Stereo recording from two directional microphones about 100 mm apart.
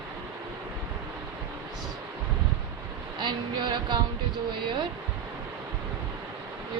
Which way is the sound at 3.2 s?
50° right (ahead or behind).